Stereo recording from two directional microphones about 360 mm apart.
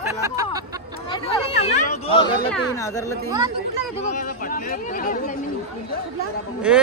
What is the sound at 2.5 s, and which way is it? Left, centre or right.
Speech, centre.